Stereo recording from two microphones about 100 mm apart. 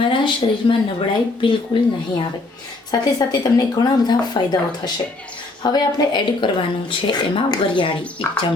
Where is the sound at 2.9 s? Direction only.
40° left (ahead or behind).